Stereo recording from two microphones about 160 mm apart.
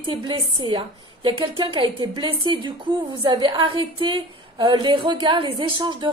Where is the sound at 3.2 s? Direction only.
30° right (ahead or behind).